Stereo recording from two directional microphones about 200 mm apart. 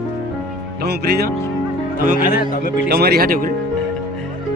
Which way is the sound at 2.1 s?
45° left (ahead or behind).